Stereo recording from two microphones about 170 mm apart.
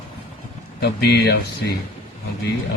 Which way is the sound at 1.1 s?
75° left (ahead or behind).